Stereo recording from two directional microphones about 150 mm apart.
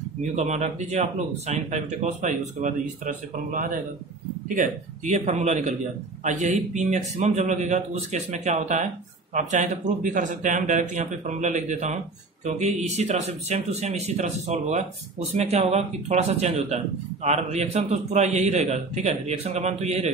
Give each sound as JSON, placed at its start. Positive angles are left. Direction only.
{"t": 0.4, "sound": "speech", "side_deg": -50}